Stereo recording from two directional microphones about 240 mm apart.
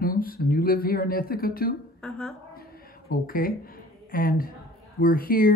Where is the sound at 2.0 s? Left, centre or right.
Centre.